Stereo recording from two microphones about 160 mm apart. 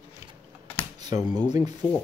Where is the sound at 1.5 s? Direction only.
25° right (ahead or behind).